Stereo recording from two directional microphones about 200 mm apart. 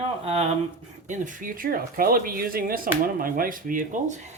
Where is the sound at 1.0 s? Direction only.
40° right (ahead or behind).